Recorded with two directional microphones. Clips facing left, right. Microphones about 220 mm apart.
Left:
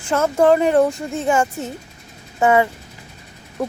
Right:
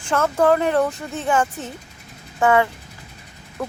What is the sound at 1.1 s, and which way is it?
Speech, 10° left (ahead or behind).